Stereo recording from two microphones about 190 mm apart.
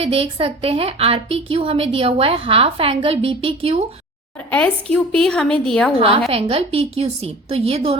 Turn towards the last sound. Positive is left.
turn(degrees=-30)  # may be behind; listen again after turning